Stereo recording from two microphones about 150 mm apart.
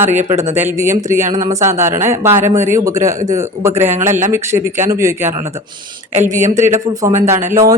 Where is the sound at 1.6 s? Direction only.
15° right (ahead or behind).